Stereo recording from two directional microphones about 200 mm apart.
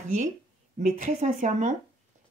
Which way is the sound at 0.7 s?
35° right (ahead or behind).